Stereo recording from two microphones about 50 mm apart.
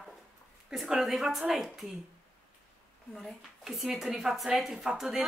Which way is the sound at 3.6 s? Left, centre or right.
Centre.